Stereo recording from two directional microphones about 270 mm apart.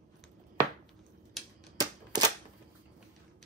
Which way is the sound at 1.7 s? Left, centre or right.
Centre.